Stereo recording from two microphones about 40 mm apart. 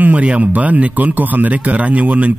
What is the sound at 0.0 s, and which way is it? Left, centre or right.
Speech, right.